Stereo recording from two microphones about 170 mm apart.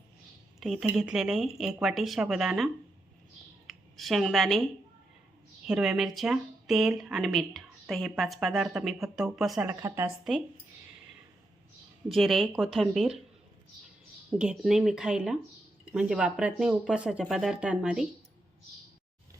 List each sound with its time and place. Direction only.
0.6 s speech: centre (ahead or behind)
3.7 s speech: centre (ahead or behind)
5.6 s speech: 5° right (ahead or behind)
9.6 s a woman's voice: 15° right (ahead or behind)
12.0 s speech: centre (ahead or behind)
14.3 s speech: 5° right (ahead or behind)